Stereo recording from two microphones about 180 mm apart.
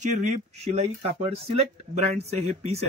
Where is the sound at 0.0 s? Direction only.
40° right (ahead or behind).